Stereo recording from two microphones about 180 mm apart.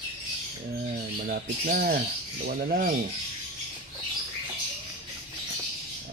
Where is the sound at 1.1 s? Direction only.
50° right (ahead or behind).